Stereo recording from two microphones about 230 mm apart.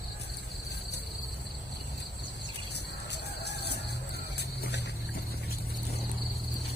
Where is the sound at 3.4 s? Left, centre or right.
Left.